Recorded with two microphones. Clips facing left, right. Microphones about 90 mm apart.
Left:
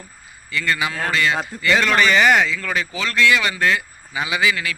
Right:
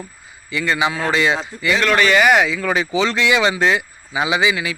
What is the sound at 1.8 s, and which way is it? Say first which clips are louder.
Speech: right 2 dB; centre (ahead or behind).